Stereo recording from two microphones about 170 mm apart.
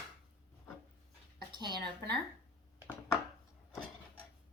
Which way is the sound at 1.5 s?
25° right (ahead or behind).